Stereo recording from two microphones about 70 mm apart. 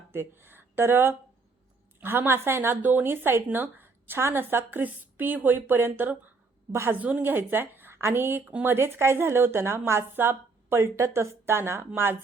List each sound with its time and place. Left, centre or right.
0.1 s a woman's voice: right